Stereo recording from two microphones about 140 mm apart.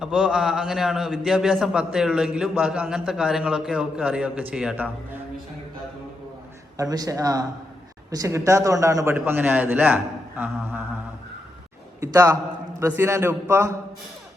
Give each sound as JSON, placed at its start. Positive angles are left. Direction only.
{"t": 0.0, "sound": "a man's voice", "side_deg": -5}
{"t": 6.7, "sound": "a man's voice", "side_deg": -25}
{"t": 11.9, "sound": "a man's voice", "side_deg": -20}